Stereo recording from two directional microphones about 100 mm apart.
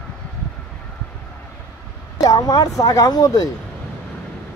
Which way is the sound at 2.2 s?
40° left (ahead or behind).